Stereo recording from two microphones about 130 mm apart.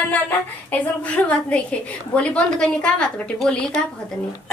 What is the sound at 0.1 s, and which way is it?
A woman's voice, 10° left (ahead or behind).